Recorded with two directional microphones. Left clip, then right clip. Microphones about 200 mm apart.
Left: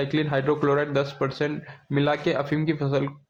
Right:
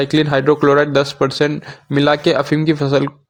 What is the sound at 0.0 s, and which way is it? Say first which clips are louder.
A man's voice: right 10 dB; 45° right (ahead or behind).